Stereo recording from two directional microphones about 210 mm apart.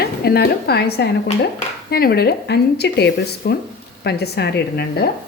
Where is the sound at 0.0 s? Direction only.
50° left (ahead or behind).